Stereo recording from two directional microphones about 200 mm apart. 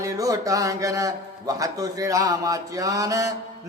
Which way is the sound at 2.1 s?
15° right (ahead or behind).